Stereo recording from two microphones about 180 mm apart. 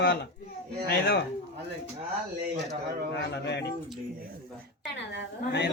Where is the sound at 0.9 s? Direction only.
65° left (ahead or behind).